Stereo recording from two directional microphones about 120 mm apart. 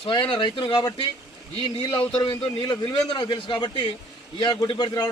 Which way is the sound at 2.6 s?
40° left (ahead or behind).